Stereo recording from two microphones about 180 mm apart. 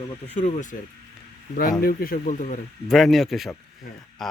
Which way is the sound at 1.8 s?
55° left (ahead or behind).